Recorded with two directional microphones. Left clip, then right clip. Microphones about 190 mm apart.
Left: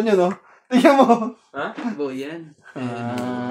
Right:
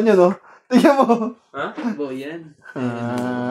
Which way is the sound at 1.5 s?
10° right (ahead or behind).